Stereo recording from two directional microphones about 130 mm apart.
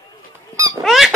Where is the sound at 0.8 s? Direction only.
Centre (ahead or behind).